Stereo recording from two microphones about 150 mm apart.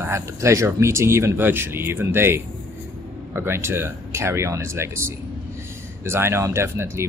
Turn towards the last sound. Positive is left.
turn(degrees=-15)  # may be behind; listen again after turning